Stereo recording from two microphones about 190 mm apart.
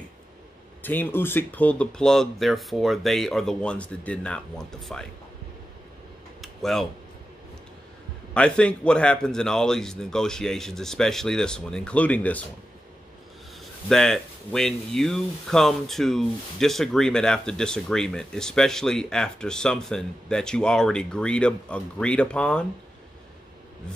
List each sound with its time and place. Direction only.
0.8 s speech: 10° left (ahead or behind)
6.4 s a sound: centre (ahead or behind)
8.4 s speech: 5° left (ahead or behind)
13.8 s speech: 5° left (ahead or behind)